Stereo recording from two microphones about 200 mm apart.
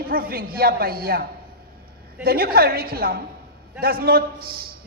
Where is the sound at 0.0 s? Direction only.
50° right (ahead or behind).